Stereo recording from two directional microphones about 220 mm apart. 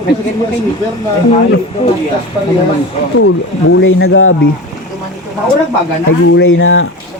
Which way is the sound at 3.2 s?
65° left (ahead or behind).